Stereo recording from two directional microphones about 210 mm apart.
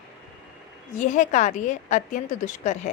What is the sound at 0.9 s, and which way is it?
A woman's voice, 35° left (ahead or behind).